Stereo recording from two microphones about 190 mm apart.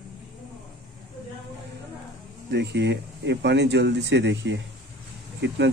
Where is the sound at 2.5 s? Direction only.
60° right (ahead or behind).